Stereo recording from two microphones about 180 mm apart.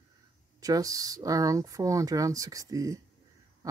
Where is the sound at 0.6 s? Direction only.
20° right (ahead or behind).